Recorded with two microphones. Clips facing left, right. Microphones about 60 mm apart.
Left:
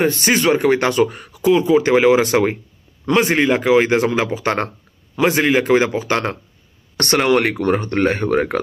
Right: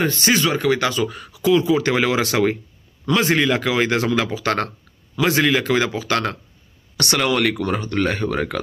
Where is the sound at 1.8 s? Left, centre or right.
Left.